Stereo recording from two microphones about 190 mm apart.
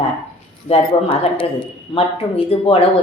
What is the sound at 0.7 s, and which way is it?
Speech, 30° left (ahead or behind).